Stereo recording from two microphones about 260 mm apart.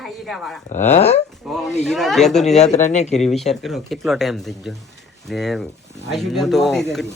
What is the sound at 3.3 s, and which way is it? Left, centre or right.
Speech, centre.